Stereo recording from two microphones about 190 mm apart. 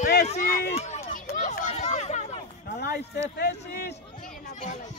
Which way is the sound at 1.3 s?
40° left (ahead or behind).